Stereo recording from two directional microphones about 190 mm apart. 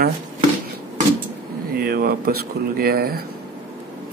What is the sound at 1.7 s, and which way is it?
Speech, 55° right (ahead or behind).